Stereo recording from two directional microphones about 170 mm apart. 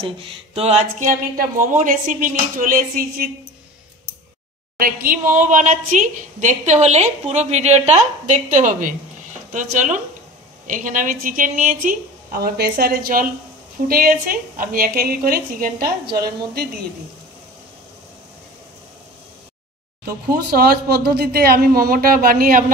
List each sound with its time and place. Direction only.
0.0 s a woman's voice: 30° right (ahead or behind); by 3.3 s 55° right (ahead or behind)
4.7 s a woman's voice: 60° right (ahead or behind)
20.5 s a woman's voice: 65° right (ahead or behind)